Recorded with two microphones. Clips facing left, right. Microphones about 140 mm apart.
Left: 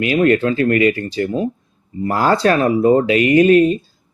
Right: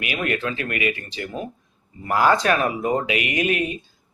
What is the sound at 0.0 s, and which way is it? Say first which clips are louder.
Speech: left 11 dB; 35° left (ahead or behind).